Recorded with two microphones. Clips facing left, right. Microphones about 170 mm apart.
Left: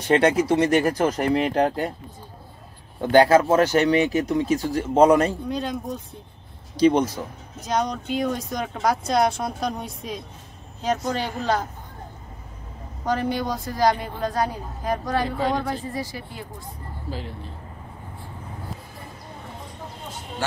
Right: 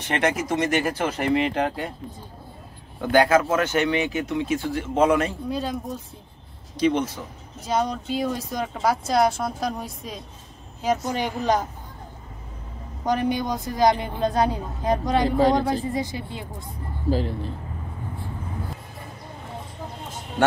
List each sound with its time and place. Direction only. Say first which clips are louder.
0.1 s speech: left 5 dB; 30° left (ahead or behind)
3.0 s speech: left 3 dB; 30° left (ahead or behind)
5.5 s speech: even; 5° right (ahead or behind)
6.8 s speech: left 4 dB; 40° left (ahead or behind)
7.6 s speech: even; 5° right (ahead or behind)
13.0 s a woman's voice: right 1 dB; 15° right (ahead or behind)
15.2 s speech: right 6 dB; 35° right (ahead or behind)
15.5 s a woman's voice: right 4 dB; 20° right (ahead or behind)